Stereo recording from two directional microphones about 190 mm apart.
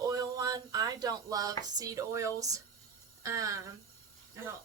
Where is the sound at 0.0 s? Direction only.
20° right (ahead or behind).